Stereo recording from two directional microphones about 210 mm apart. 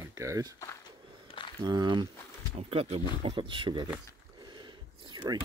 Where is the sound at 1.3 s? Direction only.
25° left (ahead or behind).